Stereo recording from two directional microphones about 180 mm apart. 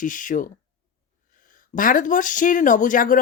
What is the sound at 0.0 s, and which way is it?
Speech, 45° left (ahead or behind).